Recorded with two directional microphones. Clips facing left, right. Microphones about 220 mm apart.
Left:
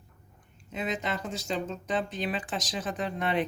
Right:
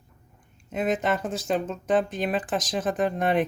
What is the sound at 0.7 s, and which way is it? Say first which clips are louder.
Speech: right 7 dB; 50° right (ahead or behind).